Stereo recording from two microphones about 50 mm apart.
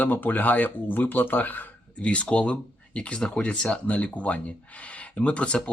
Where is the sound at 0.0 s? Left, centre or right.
Left.